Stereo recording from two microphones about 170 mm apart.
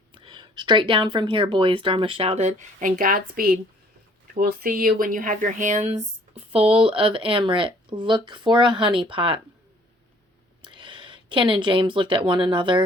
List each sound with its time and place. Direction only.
0.1 s speech: 30° right (ahead or behind)
10.6 s speech: 30° right (ahead or behind)